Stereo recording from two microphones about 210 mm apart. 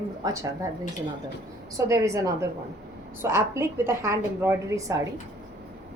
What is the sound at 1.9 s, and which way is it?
A woman's voice, 15° right (ahead or behind).